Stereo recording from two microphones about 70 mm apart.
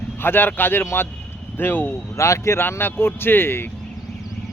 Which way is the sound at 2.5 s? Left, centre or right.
Left.